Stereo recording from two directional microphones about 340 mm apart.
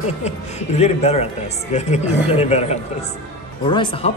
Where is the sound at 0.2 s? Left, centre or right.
Centre.